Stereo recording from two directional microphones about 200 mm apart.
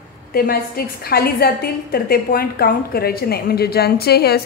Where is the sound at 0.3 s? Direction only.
50° left (ahead or behind).